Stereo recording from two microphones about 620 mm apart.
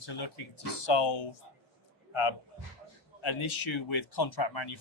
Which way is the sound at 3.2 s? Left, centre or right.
Left.